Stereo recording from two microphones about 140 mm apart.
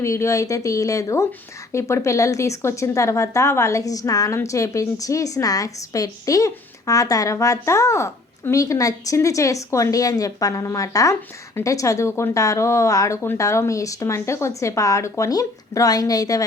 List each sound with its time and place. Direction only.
0.0 s a woman's voice: 20° left (ahead or behind)